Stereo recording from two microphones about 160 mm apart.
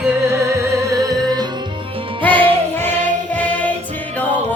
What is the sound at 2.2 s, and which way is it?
Music, 10° left (ahead or behind).